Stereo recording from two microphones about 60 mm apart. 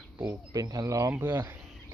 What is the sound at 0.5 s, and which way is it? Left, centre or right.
Speech, right.